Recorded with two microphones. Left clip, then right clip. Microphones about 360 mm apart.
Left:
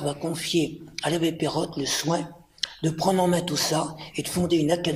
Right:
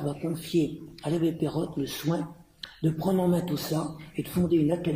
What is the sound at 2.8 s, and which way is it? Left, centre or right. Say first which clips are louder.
Speech: left 4 dB; left.